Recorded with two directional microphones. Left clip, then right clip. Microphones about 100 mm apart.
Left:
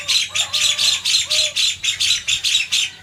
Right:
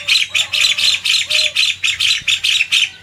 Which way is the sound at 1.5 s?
50° right (ahead or behind).